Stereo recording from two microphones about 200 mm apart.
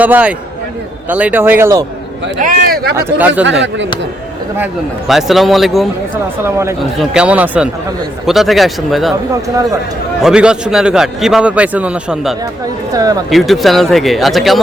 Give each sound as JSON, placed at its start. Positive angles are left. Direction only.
{"t": 0.0, "sound": "speech", "side_deg": -5}
{"t": 2.4, "sound": "speech", "side_deg": -50}
{"t": 2.9, "sound": "speech", "side_deg": -10}
{"t": 4.5, "sound": "a man's voice", "side_deg": -5}
{"t": 6.4, "sound": "speech", "side_deg": -15}
{"t": 7.0, "sound": "a man's voice", "side_deg": -5}
{"t": 10.2, "sound": "a man's voice", "side_deg": -5}
{"t": 12.9, "sound": "speech", "side_deg": -20}
{"t": 13.3, "sound": "a man's voice", "side_deg": 0}